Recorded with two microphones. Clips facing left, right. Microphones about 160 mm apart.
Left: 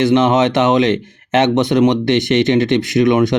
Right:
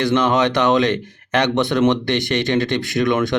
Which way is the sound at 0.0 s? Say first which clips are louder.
Left 4 dB; 20° left (ahead or behind).